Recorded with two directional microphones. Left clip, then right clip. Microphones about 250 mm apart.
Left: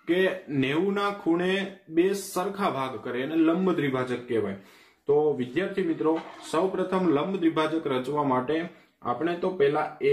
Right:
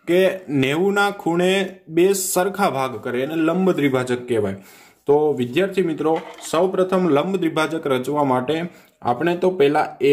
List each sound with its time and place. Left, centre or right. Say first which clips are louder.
0.0 s speech: right 7 dB; right
5.5 s speech: right 8 dB; right